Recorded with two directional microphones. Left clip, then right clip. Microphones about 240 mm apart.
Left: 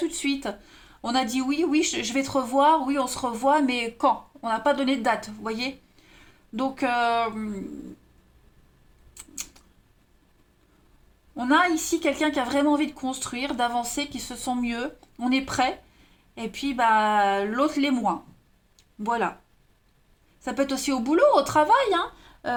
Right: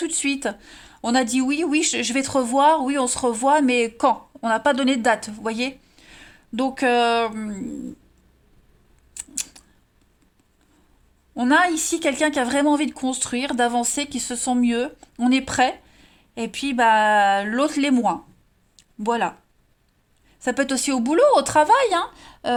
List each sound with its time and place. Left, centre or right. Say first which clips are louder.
0.0 s speech: right 4 dB; right
11.3 s speech: right 3 dB; right
20.4 s speech: right 4 dB; right